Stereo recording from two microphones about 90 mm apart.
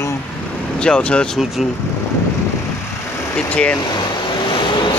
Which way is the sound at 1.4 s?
5° right (ahead or behind).